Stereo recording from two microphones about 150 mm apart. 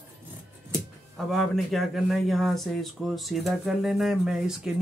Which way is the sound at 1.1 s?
Centre (ahead or behind).